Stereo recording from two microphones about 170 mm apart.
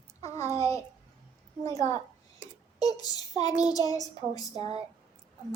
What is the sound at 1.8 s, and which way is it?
Speech, 40° right (ahead or behind).